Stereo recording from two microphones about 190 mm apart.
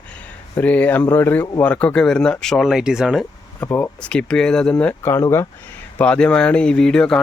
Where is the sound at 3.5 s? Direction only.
10° left (ahead or behind).